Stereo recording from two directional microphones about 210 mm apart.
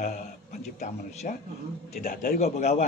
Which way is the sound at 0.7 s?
30° left (ahead or behind).